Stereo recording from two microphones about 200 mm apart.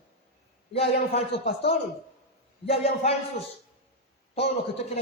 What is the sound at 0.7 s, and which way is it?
A man's voice, 30° left (ahead or behind).